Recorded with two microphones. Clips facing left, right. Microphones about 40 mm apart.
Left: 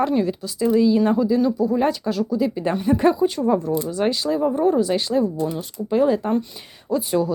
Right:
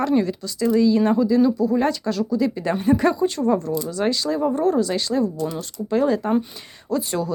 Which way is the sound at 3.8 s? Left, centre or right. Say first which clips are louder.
Left 1 dB; centre.